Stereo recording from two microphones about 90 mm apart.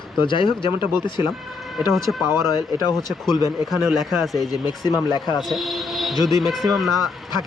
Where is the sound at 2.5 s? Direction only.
50° left (ahead or behind).